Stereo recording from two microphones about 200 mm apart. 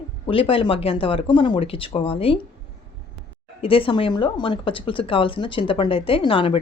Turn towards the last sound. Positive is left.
turn(degrees=25)  # may be behind; listen again after turning